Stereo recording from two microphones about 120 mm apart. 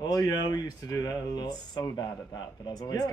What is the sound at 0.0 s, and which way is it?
Speech, 35° left (ahead or behind).